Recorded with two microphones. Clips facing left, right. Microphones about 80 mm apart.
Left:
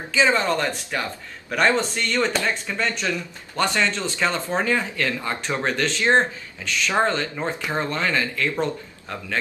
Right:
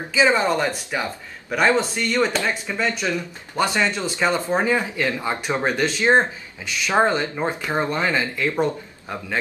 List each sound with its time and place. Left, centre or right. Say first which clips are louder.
0.1 s speech: right 2 dB; centre